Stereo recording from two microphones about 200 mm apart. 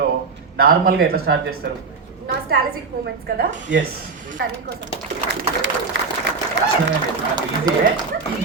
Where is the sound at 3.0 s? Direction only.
55° right (ahead or behind).